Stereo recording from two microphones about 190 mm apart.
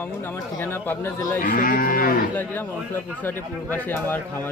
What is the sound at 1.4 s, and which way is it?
Moo, 45° left (ahead or behind).